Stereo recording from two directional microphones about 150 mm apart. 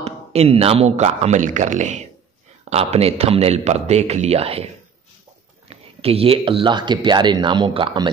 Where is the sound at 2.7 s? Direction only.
45° right (ahead or behind).